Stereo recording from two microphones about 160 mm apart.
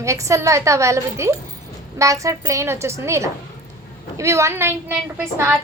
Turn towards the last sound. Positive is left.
turn(degrees=-15)  # may be behind; listen again after turning